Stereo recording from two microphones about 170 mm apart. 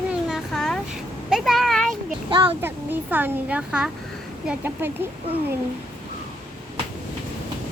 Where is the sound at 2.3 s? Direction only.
30° right (ahead or behind).